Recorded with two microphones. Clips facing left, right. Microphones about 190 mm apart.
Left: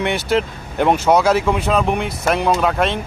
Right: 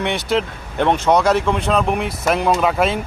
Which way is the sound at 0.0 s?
Centre (ahead or behind).